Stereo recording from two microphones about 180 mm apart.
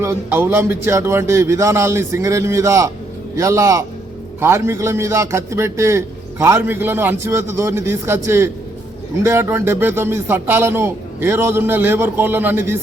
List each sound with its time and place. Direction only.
0.0 s a man's voice: 15° right (ahead or behind)